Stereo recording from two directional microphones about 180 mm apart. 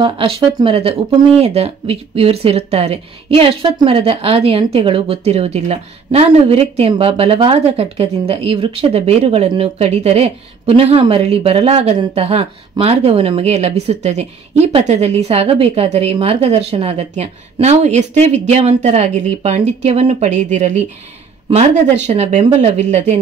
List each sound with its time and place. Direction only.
0.0 s a woman's voice: 30° right (ahead or behind)